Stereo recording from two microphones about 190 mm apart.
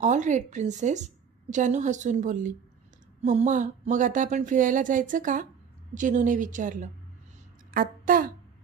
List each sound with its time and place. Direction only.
0.0 s a woman's voice: 40° right (ahead or behind)